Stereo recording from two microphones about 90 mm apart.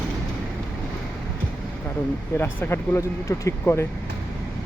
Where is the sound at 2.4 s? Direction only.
25° left (ahead or behind).